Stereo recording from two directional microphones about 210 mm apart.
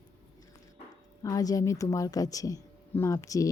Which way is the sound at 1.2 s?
15° left (ahead or behind).